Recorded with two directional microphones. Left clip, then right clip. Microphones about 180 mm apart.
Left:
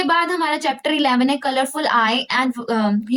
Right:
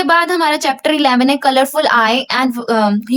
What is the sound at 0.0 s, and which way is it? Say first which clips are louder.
A woman's voice: right 6 dB; 35° right (ahead or behind).